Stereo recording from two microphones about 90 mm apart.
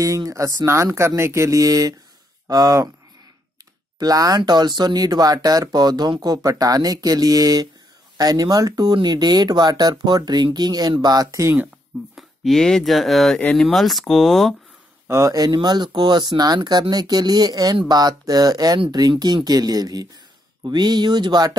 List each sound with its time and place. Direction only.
0.0 s speech: 40° right (ahead or behind)
4.0 s speech: 45° right (ahead or behind)
12.2 s speech: 5° left (ahead or behind)
15.0 s speech: 35° right (ahead or behind)